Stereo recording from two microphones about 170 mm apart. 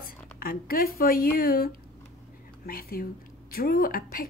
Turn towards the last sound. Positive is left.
turn(degrees=60)  # may be behind; listen again after turning